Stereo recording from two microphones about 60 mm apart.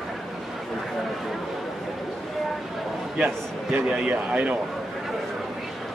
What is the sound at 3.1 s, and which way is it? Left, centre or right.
A man's voice, centre.